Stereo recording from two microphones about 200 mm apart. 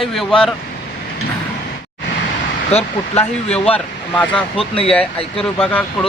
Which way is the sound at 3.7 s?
5° left (ahead or behind).